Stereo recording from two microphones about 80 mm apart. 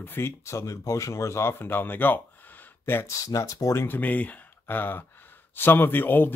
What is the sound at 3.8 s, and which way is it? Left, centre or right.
Speech, left.